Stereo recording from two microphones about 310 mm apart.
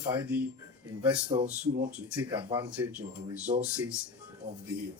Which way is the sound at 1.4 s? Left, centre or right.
Centre.